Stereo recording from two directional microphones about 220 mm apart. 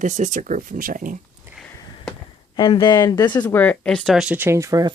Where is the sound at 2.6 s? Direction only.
20° left (ahead or behind).